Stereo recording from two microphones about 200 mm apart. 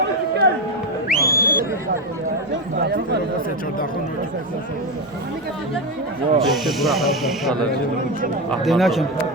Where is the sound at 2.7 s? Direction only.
55° right (ahead or behind).